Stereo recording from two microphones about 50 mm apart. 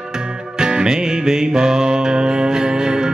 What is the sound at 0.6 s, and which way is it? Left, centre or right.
Music, centre.